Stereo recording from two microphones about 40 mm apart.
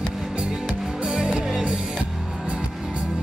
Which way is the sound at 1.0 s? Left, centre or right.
Right.